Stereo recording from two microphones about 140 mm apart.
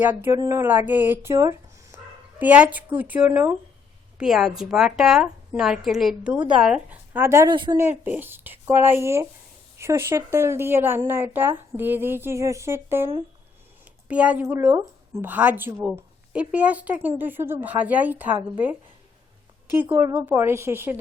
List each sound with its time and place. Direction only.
0.0 s a woman's voice: 15° right (ahead or behind)
4.2 s a woman's voice: 5° right (ahead or behind)
7.4 s speech: 35° right (ahead or behind)
7.8 s a woman's voice: 15° right (ahead or behind)